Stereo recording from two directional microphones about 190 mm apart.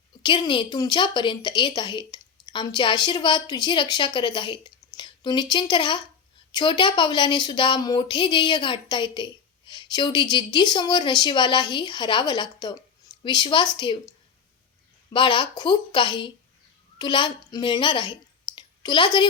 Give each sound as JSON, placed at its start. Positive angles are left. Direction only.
{"t": 0.2, "sound": "a woman's voice", "side_deg": 25}
{"t": 15.1, "sound": "a woman's voice", "side_deg": 25}